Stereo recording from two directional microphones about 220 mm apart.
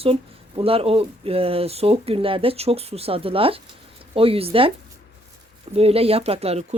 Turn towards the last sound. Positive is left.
turn(degrees=-30)  # may be behind; listen again after turning